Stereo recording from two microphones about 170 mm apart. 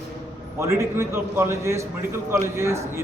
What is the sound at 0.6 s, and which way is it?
A man's voice, 15° right (ahead or behind).